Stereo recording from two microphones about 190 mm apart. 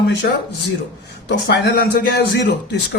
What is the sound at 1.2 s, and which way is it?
Speech, 65° left (ahead or behind).